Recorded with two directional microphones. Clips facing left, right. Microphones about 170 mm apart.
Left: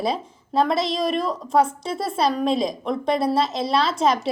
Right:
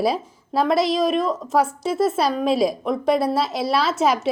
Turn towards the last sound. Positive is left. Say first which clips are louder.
# right 1 dB
turn(degrees=-5)  # may be behind; listen again after turning